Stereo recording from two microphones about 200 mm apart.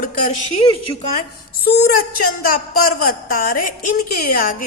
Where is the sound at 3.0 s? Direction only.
45° left (ahead or behind).